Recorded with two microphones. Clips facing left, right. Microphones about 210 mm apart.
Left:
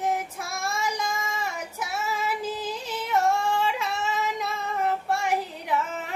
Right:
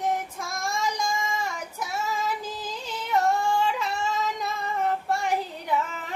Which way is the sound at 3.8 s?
85° left.